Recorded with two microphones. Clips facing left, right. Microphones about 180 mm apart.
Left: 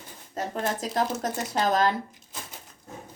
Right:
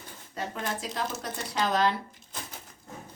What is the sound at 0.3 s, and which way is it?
A woman's voice, 40° left (ahead or behind).